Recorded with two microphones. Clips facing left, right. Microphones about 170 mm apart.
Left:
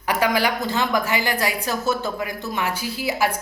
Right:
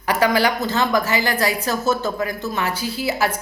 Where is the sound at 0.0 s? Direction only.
10° left (ahead or behind).